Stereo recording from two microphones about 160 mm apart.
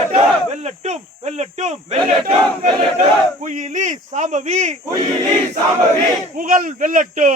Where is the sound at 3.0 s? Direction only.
50° right (ahead or behind).